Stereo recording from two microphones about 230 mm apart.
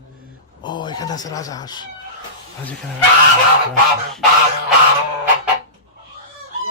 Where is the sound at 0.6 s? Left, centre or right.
Centre.